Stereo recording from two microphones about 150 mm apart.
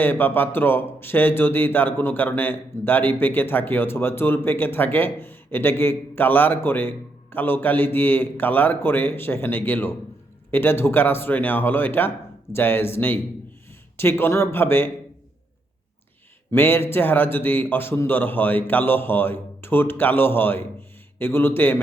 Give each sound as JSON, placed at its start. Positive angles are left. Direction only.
{"t": 0.0, "sound": "speech", "side_deg": 15}
{"t": 16.5, "sound": "speech", "side_deg": 15}